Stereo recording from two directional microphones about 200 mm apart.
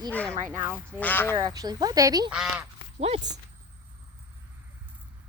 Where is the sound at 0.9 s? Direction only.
10° left (ahead or behind).